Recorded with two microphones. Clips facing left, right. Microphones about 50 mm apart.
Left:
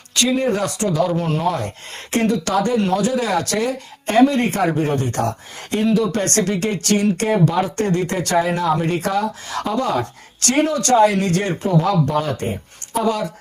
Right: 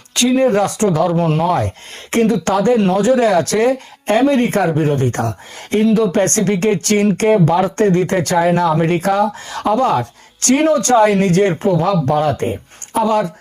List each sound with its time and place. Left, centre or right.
0.1 s speech: right
8.6 s speech: right
9.0 s speech: right